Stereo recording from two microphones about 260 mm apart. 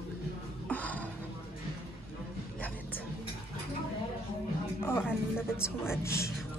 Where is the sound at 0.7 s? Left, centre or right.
Centre.